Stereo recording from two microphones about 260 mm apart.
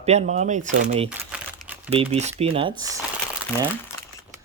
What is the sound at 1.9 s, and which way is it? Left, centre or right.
Speech, right.